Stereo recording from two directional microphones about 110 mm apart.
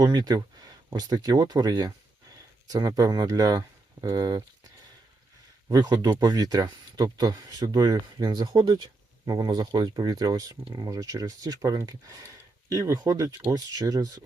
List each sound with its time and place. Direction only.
0.0 s speech: 35° right (ahead or behind)
5.7 s speech: 35° right (ahead or behind)